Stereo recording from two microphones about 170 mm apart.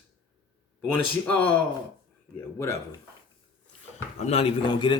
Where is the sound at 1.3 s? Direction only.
10° left (ahead or behind).